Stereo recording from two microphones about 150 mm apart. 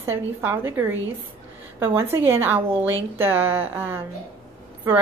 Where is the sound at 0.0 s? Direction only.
15° right (ahead or behind).